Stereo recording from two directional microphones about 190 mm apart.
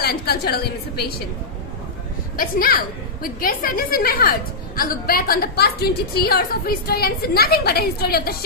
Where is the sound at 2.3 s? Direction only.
50° left (ahead or behind).